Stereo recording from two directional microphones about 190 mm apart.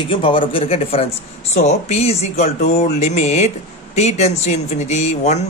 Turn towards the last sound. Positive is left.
turn(degrees=35)  # may be behind; listen again after turning